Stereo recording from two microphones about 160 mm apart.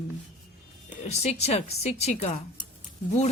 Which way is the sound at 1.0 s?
45° left (ahead or behind).